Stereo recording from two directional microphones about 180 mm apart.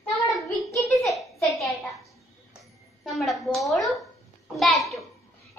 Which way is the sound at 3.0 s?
Centre (ahead or behind).